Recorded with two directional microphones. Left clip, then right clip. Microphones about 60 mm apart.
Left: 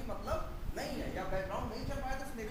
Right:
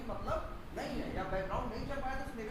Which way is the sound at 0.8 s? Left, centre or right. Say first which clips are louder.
Even; centre.